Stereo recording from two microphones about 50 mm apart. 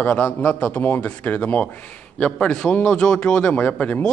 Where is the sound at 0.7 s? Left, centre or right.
Left.